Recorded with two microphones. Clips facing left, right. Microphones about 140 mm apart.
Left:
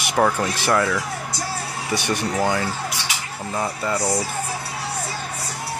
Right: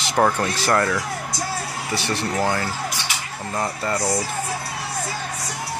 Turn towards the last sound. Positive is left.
turn(degrees=5)  # may be behind; listen again after turning